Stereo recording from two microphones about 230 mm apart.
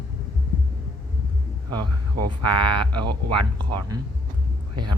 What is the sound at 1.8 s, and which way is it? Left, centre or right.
Speech, right.